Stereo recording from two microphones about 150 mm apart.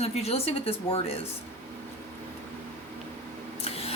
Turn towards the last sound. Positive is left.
turn(degrees=45)  # may be behind; listen again after turning